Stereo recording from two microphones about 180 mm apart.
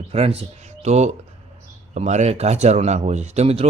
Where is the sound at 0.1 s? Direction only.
35° right (ahead or behind).